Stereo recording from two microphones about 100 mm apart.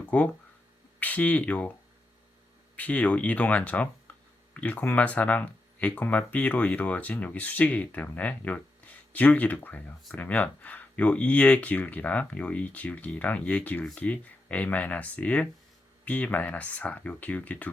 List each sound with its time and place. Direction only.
0.0 s a sound: 15° left (ahead or behind)
0.9 s speech: 15° left (ahead or behind)
2.7 s speech: 15° left (ahead or behind)